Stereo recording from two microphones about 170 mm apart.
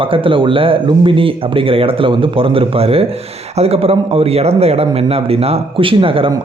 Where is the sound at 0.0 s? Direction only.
30° right (ahead or behind).